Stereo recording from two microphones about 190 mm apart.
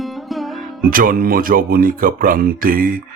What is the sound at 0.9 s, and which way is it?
Speech, 50° right (ahead or behind).